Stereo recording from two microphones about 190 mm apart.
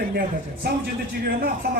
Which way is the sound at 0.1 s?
50° right (ahead or behind).